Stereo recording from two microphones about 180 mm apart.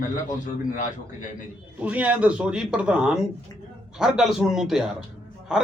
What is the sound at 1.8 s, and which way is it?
A man's voice, 10° right (ahead or behind).